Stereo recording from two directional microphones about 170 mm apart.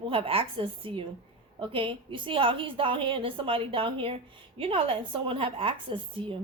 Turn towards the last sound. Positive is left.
turn(degrees=-30)  # may be behind; listen again after turning